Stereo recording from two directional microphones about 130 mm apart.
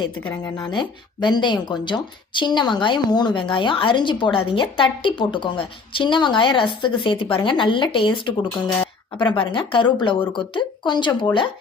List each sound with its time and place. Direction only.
0.2 s speech: 15° left (ahead or behind)
0.5 s speech: 35° left (ahead or behind)